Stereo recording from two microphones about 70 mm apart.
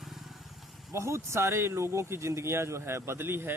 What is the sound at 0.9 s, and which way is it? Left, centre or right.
Speech, right.